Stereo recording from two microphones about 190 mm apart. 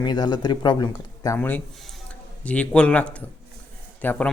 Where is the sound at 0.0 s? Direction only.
25° left (ahead or behind).